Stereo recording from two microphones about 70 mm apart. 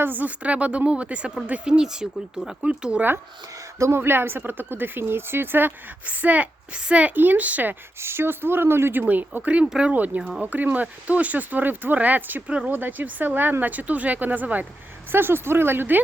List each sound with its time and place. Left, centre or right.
0.0 s speech: right
3.8 s speech: right; by 9.9 s centre
9.9 s a woman's voice: right